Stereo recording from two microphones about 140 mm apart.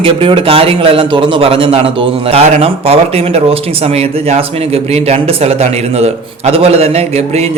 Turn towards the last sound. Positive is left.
turn(degrees=-50)  # may be behind; listen again after turning